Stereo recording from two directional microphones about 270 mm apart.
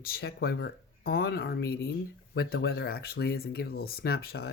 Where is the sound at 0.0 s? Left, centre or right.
Left.